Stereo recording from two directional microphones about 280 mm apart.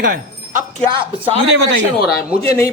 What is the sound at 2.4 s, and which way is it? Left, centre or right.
Speech, centre.